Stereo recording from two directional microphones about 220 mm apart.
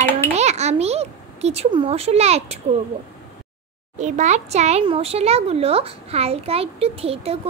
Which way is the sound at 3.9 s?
35° right (ahead or behind).